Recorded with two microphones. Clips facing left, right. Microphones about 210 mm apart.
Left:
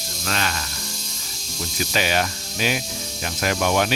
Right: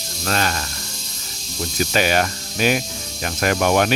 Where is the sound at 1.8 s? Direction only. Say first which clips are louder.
Right 4 dB; 50° right (ahead or behind).